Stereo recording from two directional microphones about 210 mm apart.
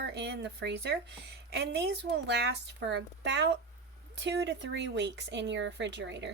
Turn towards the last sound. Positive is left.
turn(degrees=-55)  # may be behind; listen again after turning